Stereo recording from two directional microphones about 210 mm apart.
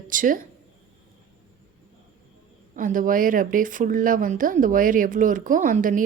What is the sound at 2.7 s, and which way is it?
Speech, 40° right (ahead or behind).